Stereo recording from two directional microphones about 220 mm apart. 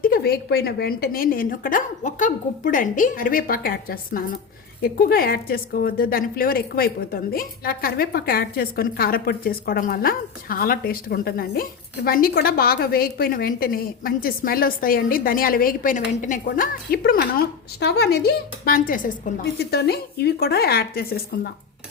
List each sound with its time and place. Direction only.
0.0 s a woman's voice: 45° left (ahead or behind)